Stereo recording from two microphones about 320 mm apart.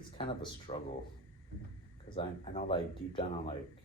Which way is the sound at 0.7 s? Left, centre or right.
Centre.